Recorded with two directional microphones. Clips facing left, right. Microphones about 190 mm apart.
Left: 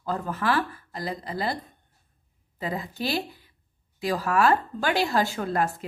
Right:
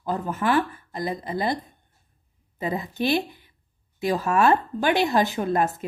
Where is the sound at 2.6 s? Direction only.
20° right (ahead or behind).